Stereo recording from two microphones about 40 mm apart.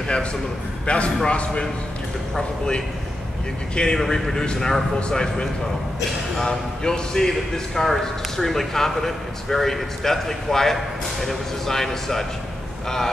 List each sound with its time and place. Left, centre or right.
0.8 s a man's voice: left
3.7 s a man's voice: left